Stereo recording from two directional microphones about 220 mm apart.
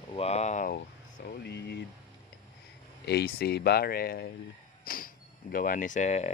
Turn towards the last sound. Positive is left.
turn(degrees=30)  # may be behind; listen again after turning